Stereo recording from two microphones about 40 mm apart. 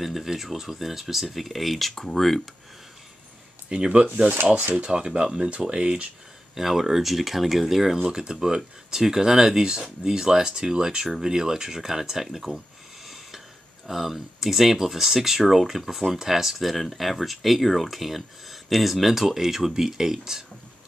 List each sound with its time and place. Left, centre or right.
0.0 s speech: centre
3.6 s speech: right
6.5 s speech: centre